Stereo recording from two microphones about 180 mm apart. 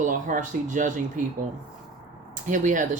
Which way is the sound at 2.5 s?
45° right (ahead or behind).